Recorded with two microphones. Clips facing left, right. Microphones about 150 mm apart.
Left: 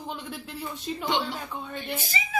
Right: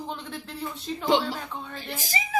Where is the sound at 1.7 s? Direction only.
35° right (ahead or behind).